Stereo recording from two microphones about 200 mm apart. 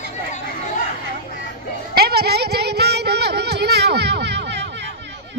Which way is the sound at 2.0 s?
50° right (ahead or behind).